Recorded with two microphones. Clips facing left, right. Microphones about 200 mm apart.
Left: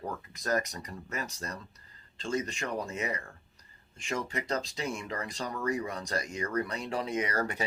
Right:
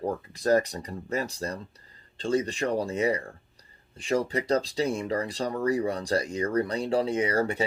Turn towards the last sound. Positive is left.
turn(degrees=-30)  # may be behind; listen again after turning